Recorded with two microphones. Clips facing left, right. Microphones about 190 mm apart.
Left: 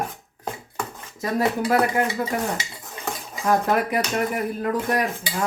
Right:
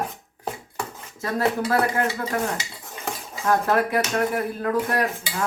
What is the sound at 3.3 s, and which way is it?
Speech, 15° left (ahead or behind).